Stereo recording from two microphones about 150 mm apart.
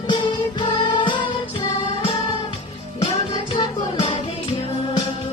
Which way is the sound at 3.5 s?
30° left (ahead or behind).